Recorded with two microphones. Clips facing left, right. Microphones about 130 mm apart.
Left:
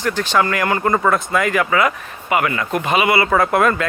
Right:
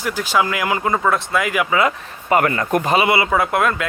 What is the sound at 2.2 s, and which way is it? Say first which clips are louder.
Speech: right 2 dB; 40° right (ahead or behind).